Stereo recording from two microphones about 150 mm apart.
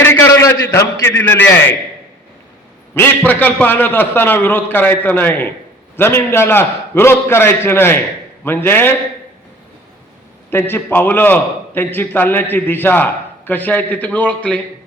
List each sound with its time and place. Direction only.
0.0 s a man's voice: 15° left (ahead or behind)
2.9 s a man's voice: 10° left (ahead or behind)
10.5 s a man's voice: 15° left (ahead or behind)